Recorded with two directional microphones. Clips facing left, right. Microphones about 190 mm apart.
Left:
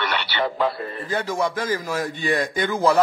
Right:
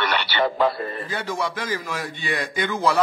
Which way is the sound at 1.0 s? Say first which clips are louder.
Left 7 dB; 45° left (ahead or behind).